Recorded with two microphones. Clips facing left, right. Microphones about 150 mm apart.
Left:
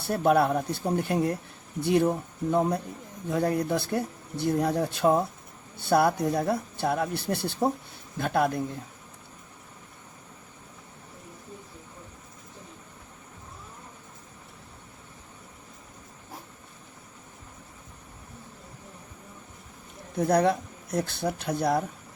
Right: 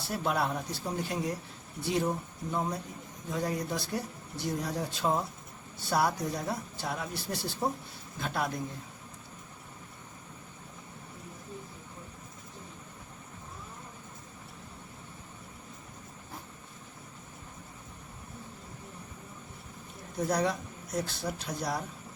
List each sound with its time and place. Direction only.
0.0 s speech: 55° left (ahead or behind)
20.1 s speech: 60° left (ahead or behind)